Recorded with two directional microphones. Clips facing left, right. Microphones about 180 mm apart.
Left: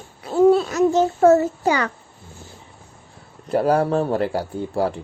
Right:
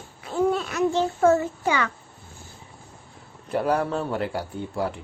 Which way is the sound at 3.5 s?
40° left (ahead or behind).